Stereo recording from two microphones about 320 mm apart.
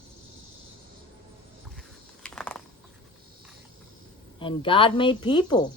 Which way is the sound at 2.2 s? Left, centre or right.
Centre.